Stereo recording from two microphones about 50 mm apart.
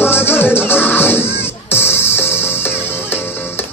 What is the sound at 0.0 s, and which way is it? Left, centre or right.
Music, left.